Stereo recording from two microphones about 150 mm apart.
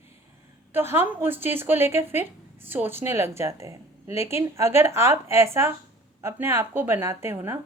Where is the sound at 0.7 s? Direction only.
15° right (ahead or behind).